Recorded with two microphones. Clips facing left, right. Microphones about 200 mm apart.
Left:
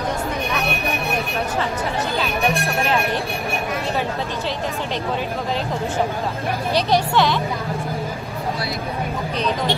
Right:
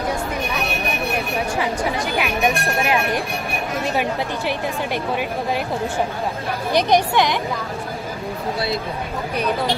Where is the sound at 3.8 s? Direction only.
15° right (ahead or behind).